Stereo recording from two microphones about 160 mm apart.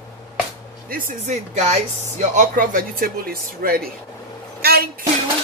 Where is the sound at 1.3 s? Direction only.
45° right (ahead or behind); by 3.9 s 70° right (ahead or behind).